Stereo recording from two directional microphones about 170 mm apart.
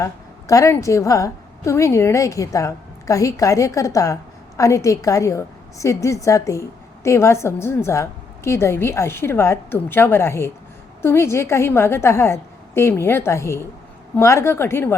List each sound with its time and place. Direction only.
0.0 s a woman's voice: 20° left (ahead or behind)